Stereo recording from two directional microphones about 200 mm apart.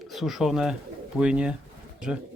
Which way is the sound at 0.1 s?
Centre (ahead or behind).